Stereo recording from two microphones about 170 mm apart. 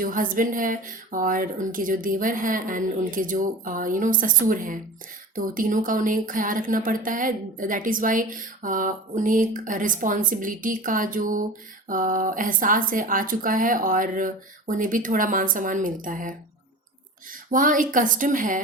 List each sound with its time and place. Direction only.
0.0 s speech: 55° right (ahead or behind)
17.5 s speech: 50° right (ahead or behind)